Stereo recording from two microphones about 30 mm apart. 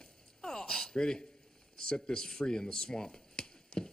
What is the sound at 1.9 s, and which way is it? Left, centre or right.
Speech, left.